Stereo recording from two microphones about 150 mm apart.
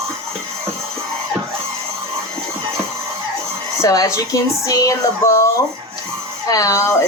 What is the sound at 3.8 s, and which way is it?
Speech, 20° left (ahead or behind).